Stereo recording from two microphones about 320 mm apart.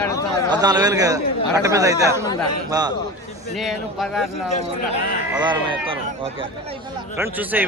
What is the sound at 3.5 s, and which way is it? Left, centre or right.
Speech, centre.